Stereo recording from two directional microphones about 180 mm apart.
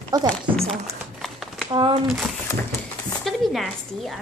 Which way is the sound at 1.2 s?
Centre (ahead or behind).